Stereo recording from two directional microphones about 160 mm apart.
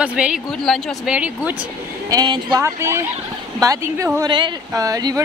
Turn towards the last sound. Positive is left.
turn(degrees=-20)  # may be behind; listen again after turning